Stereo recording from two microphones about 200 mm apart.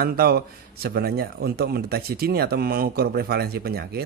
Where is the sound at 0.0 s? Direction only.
50° right (ahead or behind).